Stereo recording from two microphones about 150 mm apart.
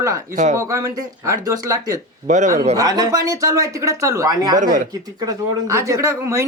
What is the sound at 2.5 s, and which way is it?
Speech, 45° right (ahead or behind).